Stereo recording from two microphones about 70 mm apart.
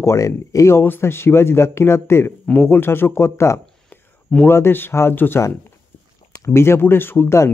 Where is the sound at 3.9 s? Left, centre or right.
Left.